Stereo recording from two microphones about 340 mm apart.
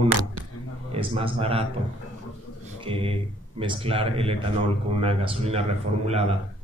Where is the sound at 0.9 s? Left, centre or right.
Centre.